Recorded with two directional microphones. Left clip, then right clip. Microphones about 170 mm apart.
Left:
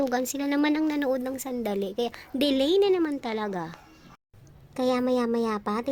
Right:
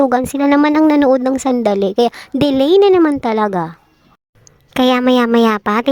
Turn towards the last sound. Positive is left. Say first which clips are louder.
# right 14 dB
turn(degrees=-35)  # may be behind; listen again after turning